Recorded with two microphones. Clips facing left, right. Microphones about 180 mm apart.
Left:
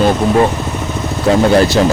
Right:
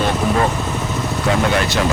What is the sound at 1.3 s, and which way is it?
Speech, 35° left (ahead or behind).